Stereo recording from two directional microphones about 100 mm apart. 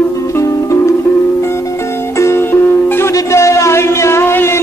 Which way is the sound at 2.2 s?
25° left (ahead or behind).